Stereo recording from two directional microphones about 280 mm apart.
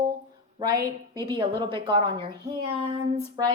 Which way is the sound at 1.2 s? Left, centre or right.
Centre.